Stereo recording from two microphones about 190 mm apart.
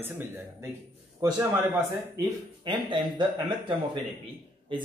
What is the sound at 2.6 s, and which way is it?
Speech, 25° right (ahead or behind).